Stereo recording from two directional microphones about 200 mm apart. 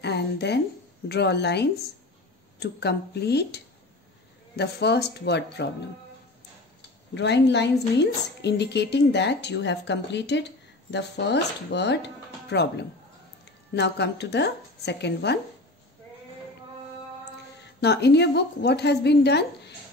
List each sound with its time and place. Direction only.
0.0 s a woman's voice: 55° left (ahead or behind)
7.2 s a woman's voice: 60° left (ahead or behind)
17.7 s a woman's voice: 55° left (ahead or behind)